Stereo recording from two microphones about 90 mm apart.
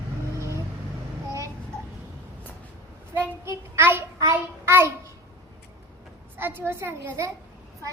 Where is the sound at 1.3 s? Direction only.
35° right (ahead or behind).